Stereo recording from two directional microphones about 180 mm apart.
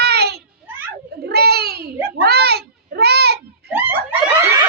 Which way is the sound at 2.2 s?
65° right (ahead or behind).